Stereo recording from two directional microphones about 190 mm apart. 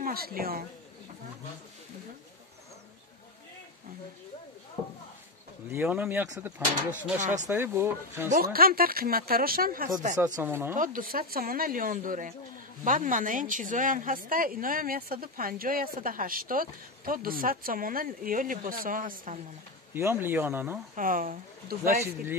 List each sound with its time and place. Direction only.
0.0 s speech: 50° right (ahead or behind)
5.7 s speech: 10° right (ahead or behind)
7.2 s speech: 40° right (ahead or behind)
7.4 s speech: 10° right (ahead or behind)
8.3 s a woman's voice: 50° right (ahead or behind)
10.1 s speech: 15° right (ahead or behind)
10.8 s a woman's voice: 45° right (ahead or behind)
19.9 s speech: 10° right (ahead or behind)
20.9 s speech: 45° right (ahead or behind)